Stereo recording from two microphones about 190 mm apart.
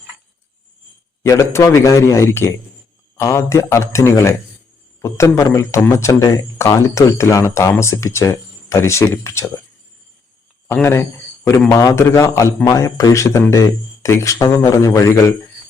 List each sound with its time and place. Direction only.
1.2 s speech: 15° left (ahead or behind)
10.7 s speech: 10° left (ahead or behind)